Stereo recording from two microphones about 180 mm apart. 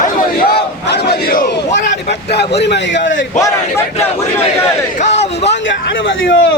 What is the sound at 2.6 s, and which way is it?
Speech, 80° left.